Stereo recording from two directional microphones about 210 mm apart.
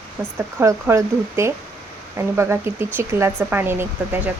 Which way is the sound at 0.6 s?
10° right (ahead or behind).